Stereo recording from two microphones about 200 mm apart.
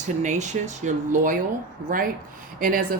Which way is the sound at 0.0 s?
35° right (ahead or behind).